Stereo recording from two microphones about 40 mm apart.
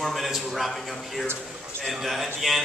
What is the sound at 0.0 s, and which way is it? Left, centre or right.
A man's voice, centre.